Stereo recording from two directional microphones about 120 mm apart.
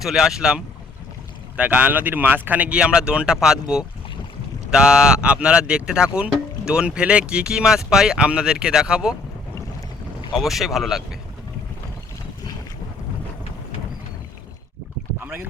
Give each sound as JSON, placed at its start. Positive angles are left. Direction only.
{"t": 0.0, "sound": "speech", "side_deg": -5}
{"t": 10.3, "sound": "speech", "side_deg": 0}
{"t": 15.2, "sound": "boat", "side_deg": -15}